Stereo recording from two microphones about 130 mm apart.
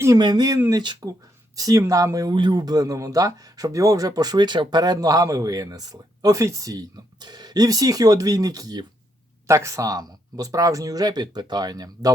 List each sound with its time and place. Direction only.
0.2 s speech: 30° right (ahead or behind)